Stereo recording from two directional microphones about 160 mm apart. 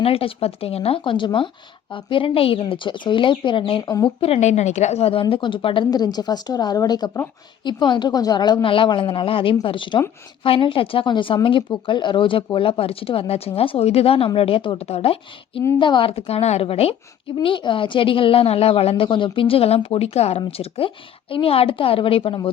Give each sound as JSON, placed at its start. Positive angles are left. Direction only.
{"t": 0.0, "sound": "a woman's voice", "side_deg": 35}
{"t": 4.2, "sound": "a woman's voice", "side_deg": 40}